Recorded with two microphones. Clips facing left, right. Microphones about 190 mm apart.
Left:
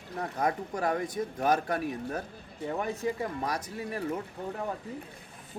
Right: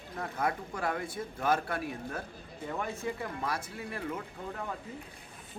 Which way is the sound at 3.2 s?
40° left (ahead or behind).